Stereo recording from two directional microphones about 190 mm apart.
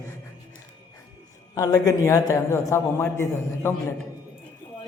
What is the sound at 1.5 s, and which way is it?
A man's voice, 20° left (ahead or behind).